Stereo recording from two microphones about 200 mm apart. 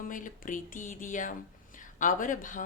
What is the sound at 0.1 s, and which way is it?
Speech, 40° left (ahead or behind).